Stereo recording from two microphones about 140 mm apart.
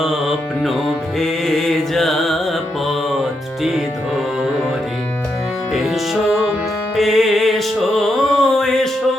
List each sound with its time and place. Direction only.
0.0 s music: centre (ahead or behind)
5.7 s music: centre (ahead or behind)